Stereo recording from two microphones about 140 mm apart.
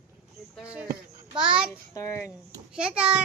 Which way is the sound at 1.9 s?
20° left (ahead or behind).